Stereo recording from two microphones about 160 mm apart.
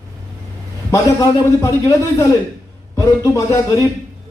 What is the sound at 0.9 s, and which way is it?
A man's voice, 20° left (ahead or behind).